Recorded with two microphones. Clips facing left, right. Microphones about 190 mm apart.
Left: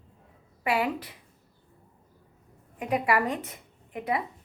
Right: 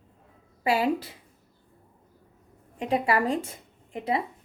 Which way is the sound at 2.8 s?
30° right (ahead or behind).